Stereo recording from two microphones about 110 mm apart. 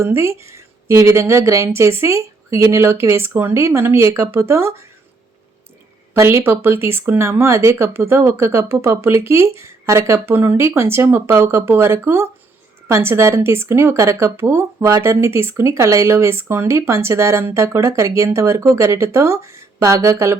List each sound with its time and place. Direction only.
0.0 s speech: 25° right (ahead or behind)
6.1 s speech: 25° right (ahead or behind)